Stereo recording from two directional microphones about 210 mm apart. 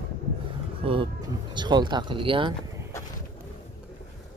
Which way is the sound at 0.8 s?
25° right (ahead or behind).